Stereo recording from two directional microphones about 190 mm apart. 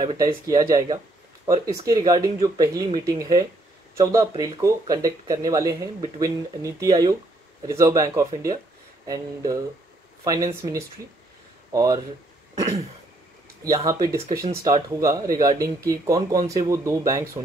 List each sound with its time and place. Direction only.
0.0 s speech: 20° right (ahead or behind)
13.9 s speech: 15° right (ahead or behind)